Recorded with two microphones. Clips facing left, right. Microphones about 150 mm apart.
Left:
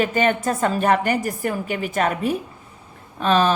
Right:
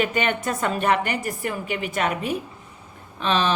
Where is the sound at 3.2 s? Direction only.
45° left (ahead or behind).